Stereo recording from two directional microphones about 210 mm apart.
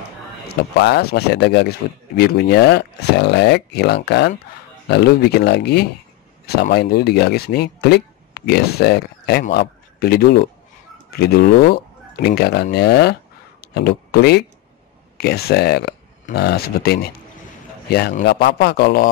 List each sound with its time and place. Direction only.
0.5 s speech: 50° left (ahead or behind)